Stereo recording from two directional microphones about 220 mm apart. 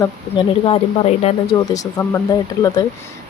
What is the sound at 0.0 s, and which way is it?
Speech, 25° left (ahead or behind).